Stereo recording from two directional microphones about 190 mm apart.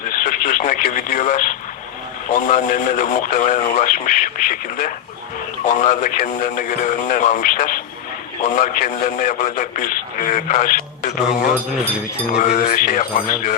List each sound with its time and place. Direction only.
0.2 s a man's voice: 45° left (ahead or behind)
12.4 s a man's voice: 45° left (ahead or behind)